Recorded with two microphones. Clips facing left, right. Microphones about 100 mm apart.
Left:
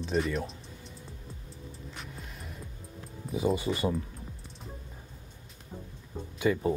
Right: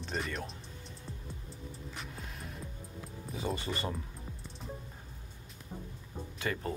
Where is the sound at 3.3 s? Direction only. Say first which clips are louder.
Left 8 dB; 10° left (ahead or behind).